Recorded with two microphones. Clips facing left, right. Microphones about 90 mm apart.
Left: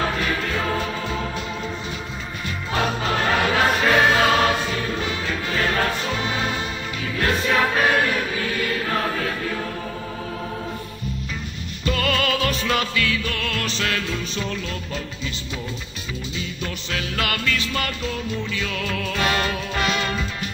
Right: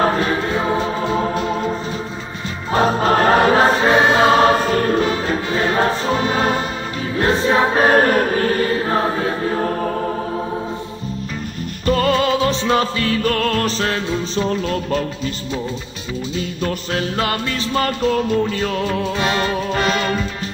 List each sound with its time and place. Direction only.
0.0 s music: 35° right (ahead or behind)
7.2 s choir: 30° right (ahead or behind)
11.8 s music: 35° right (ahead or behind)
16.3 s music: 40° right (ahead or behind)